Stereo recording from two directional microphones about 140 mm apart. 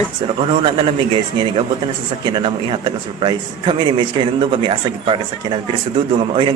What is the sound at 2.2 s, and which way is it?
A man's voice, 35° right (ahead or behind).